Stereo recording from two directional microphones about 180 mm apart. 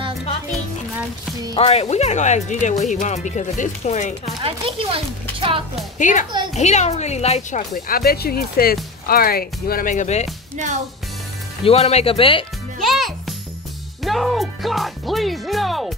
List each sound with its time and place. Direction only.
1.5 s speech: 35° left (ahead or behind)
4.4 s speech: 30° right (ahead or behind)
5.9 s speech: 45° left (ahead or behind)
7.7 s speech: 55° left (ahead or behind); by 10.3 s 40° left (ahead or behind)
11.6 s speech: 35° left (ahead or behind)
12.8 s speech: centre (ahead or behind)